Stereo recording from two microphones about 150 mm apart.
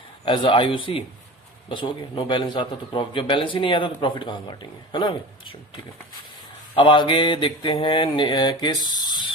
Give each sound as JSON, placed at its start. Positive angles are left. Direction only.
{"t": 0.3, "sound": "a man's voice", "side_deg": 30}